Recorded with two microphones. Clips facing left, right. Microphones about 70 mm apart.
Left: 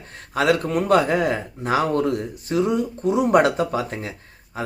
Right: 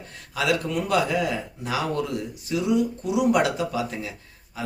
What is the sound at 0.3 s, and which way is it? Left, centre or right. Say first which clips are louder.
Speech: left 5 dB; left.